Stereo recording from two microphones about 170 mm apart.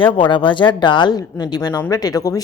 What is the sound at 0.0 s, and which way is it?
A woman's voice, 30° left (ahead or behind).